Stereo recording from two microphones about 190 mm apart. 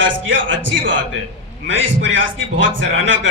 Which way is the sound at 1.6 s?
80° right.